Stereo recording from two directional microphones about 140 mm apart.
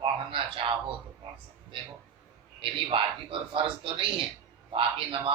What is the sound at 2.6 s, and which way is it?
Speech, 40° right (ahead or behind).